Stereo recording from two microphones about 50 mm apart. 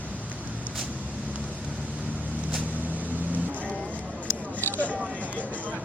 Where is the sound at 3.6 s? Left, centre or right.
Centre.